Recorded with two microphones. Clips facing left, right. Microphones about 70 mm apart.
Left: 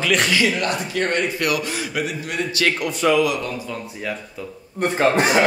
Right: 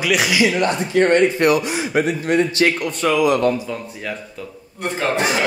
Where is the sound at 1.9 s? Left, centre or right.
Right.